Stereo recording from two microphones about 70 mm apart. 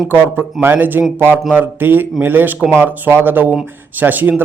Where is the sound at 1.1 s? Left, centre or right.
Right.